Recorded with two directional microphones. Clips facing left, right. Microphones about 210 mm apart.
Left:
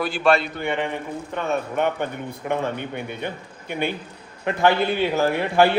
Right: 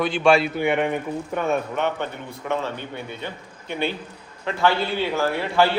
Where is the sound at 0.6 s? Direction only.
15° right (ahead or behind).